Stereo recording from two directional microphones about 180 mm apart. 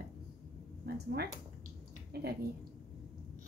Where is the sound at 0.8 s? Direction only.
60° right (ahead or behind).